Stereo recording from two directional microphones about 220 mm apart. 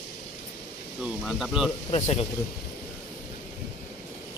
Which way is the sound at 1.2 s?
Centre (ahead or behind).